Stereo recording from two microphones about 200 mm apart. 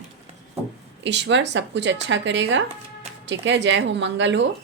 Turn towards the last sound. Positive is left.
turn(degrees=-65)  # may be behind; listen again after turning